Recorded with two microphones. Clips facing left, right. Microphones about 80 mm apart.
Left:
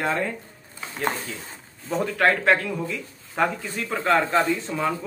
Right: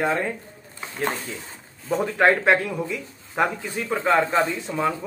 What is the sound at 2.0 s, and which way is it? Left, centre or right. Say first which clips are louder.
A man's voice: right 2 dB; centre.